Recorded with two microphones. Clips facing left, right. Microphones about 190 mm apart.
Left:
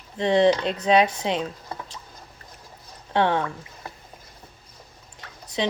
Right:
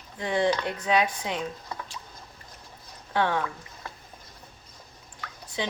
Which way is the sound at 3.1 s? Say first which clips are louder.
Left 4 dB; 25° left (ahead or behind).